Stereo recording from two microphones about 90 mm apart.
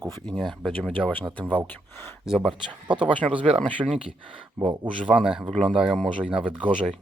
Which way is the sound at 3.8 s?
35° right (ahead or behind).